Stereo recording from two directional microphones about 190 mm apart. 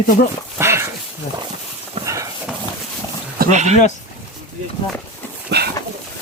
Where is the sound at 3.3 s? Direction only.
45° right (ahead or behind).